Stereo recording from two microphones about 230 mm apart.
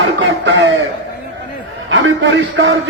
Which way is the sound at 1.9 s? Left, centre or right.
Right.